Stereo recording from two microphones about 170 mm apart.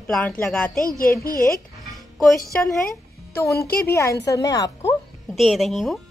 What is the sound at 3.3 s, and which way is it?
A woman's voice, 15° left (ahead or behind).